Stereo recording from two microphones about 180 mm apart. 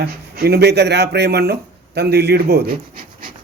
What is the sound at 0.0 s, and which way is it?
Speech, 60° right (ahead or behind).